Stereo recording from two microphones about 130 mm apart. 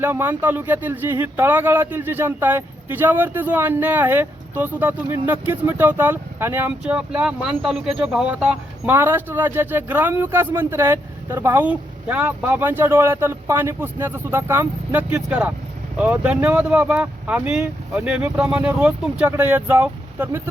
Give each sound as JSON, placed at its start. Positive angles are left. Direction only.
{"t": 0.0, "sound": "speech", "side_deg": -15}